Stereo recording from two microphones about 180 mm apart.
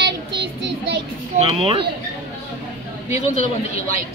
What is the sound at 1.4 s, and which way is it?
Speech, 30° right (ahead or behind).